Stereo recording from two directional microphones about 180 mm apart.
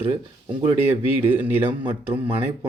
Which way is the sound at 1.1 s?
10° right (ahead or behind).